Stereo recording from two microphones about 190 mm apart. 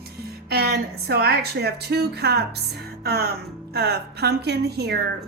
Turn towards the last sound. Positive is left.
turn(degrees=-60)  # may be behind; listen again after turning